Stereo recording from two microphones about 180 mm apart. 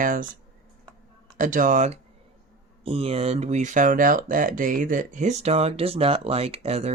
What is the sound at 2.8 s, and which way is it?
Speech, 30° right (ahead or behind).